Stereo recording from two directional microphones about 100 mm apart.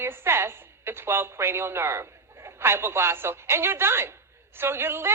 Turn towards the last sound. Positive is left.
turn(degrees=-25)  # may be behind; listen again after turning